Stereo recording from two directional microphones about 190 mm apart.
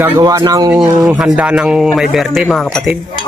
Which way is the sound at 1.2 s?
5° right (ahead or behind).